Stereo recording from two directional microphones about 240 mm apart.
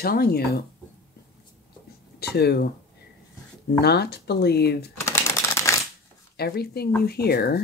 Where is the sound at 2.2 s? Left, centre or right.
Left.